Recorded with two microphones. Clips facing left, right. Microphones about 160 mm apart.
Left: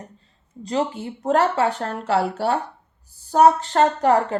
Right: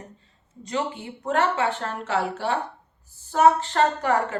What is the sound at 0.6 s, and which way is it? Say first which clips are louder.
A woman's voice: left 5 dB; 35° left (ahead or behind).